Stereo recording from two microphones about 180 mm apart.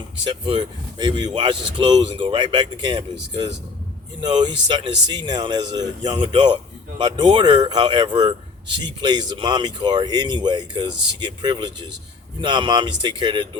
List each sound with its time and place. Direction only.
0.3 s speech: 25° right (ahead or behind)